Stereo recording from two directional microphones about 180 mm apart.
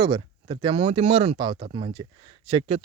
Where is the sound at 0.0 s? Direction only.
25° right (ahead or behind).